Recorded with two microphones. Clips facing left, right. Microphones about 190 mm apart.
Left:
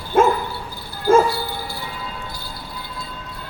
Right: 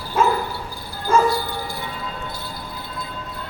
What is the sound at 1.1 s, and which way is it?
Bow-wow, 50° left (ahead or behind).